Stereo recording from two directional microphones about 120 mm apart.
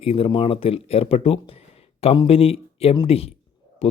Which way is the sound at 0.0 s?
50° left (ahead or behind).